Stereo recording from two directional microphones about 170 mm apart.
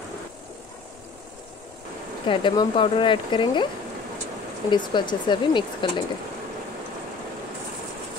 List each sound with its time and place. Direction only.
2.2 s speech: 30° left (ahead or behind)
4.6 s speech: 25° left (ahead or behind)